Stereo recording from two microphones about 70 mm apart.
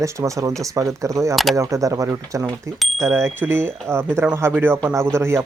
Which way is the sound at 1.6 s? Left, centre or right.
Right.